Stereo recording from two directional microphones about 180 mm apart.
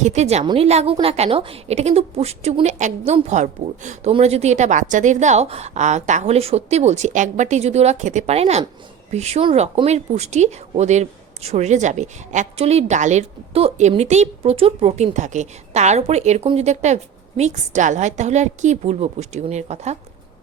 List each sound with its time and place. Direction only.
0.0 s speech: 40° right (ahead or behind)